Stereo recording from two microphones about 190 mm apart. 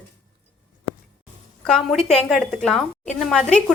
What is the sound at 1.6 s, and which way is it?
Speech, centre (ahead or behind).